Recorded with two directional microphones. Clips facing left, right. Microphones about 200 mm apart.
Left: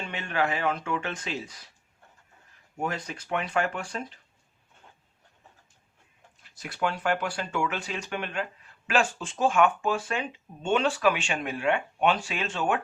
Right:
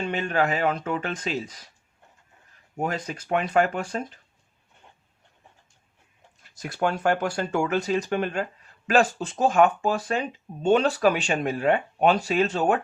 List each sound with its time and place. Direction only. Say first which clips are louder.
0.0 s speech: right 5 dB; 40° right (ahead or behind)
2.8 s speech: right 3 dB; 40° right (ahead or behind)
6.6 s speech: right 4 dB; 45° right (ahead or behind)